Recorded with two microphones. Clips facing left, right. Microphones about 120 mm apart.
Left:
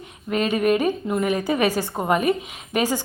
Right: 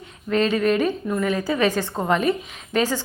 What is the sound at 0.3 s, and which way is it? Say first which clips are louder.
A woman's voice: even; 15° left (ahead or behind).